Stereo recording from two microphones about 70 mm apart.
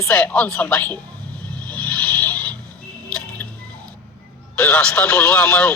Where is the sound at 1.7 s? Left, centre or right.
Left.